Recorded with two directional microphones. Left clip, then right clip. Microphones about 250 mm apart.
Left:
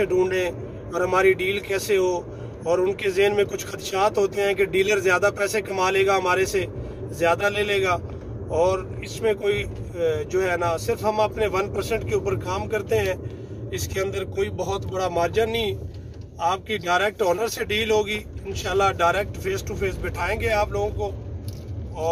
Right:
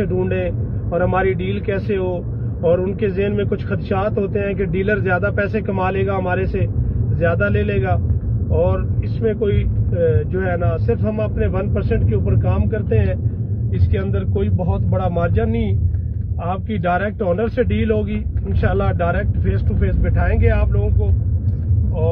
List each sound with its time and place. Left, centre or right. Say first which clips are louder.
0.0 s a man's voice: even; centre
9.2 s a man's voice: right 3 dB; centre
15.0 s a man's voice: right 1 dB; centre